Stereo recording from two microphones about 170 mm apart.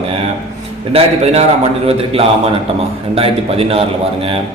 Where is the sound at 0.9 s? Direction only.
35° right (ahead or behind).